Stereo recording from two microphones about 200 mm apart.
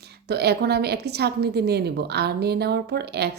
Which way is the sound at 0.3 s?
55° right (ahead or behind).